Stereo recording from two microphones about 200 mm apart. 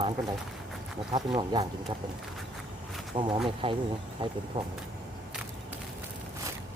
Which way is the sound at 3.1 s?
25° right (ahead or behind).